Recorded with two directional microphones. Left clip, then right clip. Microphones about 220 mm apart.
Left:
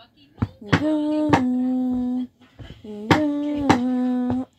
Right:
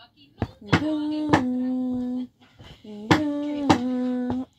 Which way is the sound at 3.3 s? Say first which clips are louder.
Left 2 dB; 40° left (ahead or behind).